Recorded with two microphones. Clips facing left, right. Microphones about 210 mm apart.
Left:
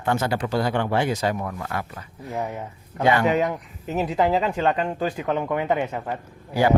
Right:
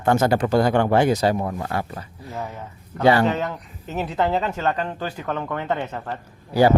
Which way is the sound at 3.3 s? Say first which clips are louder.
Left 3 dB; 15° left (ahead or behind).